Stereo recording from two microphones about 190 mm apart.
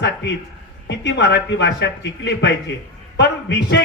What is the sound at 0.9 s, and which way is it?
A man's voice, 65° left (ahead or behind).